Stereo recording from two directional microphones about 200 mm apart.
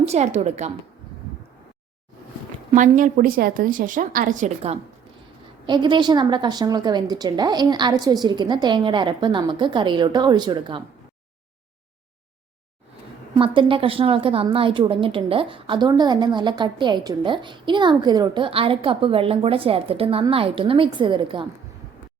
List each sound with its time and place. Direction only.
0.0 s a woman's voice: 35° right (ahead or behind)
2.7 s a woman's voice: 40° right (ahead or behind)
5.6 s a woman's voice: 25° right (ahead or behind)
13.3 s a woman's voice: 25° right (ahead or behind)